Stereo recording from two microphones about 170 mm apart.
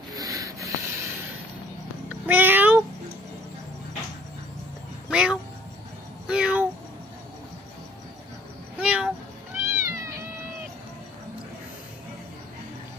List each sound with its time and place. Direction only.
0.1 s rub: 20° right (ahead or behind)
2.0 s meow: 10° right (ahead or behind)
5.1 s music: 5° right (ahead or behind)
6.2 s a sound: 5° right (ahead or behind)
8.7 s meow: 5° right (ahead or behind)
9.7 s cat: 20° right (ahead or behind)